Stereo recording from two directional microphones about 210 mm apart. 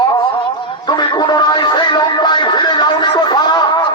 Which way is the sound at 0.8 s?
20° left (ahead or behind).